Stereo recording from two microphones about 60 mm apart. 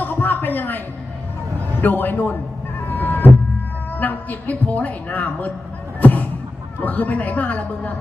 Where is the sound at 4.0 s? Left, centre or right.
Left.